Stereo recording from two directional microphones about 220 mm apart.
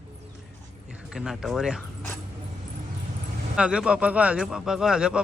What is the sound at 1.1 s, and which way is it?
Speech, centre (ahead or behind).